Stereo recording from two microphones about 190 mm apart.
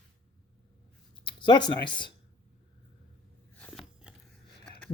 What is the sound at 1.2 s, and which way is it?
Speech, 25° left (ahead or behind).